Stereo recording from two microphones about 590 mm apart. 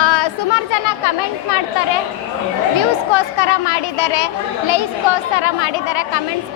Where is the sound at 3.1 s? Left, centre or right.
Left.